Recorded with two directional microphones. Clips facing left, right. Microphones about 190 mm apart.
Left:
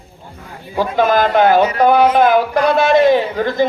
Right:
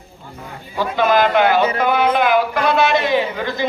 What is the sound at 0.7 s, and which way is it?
A man's voice, 45° left (ahead or behind).